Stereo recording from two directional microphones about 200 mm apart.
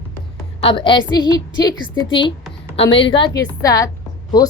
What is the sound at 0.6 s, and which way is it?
A woman's voice, 25° left (ahead or behind).